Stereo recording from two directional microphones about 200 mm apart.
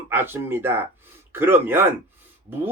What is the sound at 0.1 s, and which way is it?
Speech, 10° right (ahead or behind).